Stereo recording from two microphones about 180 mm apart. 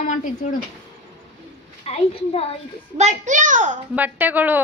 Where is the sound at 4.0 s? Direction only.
10° right (ahead or behind).